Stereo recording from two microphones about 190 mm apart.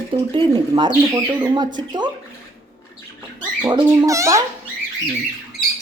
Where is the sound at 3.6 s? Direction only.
20° right (ahead or behind).